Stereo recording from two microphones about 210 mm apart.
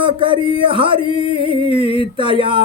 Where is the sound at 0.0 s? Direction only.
25° right (ahead or behind).